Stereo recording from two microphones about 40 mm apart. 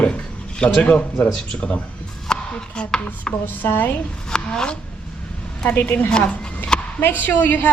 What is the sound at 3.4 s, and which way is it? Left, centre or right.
Speech, left.